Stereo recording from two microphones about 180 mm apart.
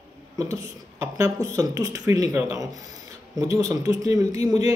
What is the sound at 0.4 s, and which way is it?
Speech, 15° right (ahead or behind).